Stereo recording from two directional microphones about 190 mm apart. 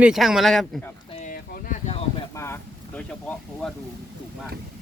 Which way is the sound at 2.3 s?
15° left (ahead or behind).